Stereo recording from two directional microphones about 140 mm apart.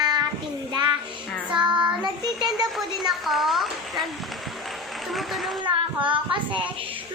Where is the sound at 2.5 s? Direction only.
Centre (ahead or behind).